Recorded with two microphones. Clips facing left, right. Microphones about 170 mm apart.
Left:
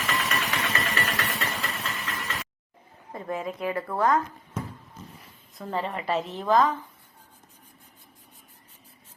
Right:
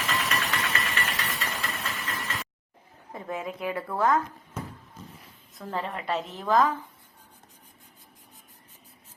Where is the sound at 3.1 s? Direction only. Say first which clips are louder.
Left 2 dB; centre (ahead or behind).